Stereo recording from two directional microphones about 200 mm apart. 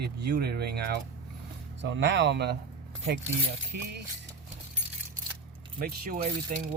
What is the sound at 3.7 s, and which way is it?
Speech, 50° right (ahead or behind).